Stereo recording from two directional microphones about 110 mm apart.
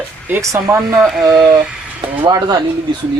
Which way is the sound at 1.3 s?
10° right (ahead or behind).